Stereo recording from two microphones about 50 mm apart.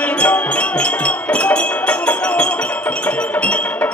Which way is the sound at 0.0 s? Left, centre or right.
Left.